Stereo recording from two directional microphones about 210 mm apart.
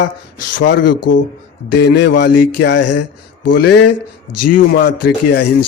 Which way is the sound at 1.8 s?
50° left (ahead or behind).